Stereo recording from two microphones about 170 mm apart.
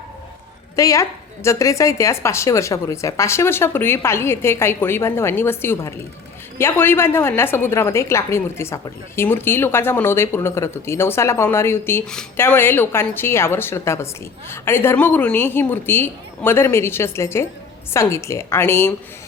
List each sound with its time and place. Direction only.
0.8 s a woman's voice: 20° left (ahead or behind)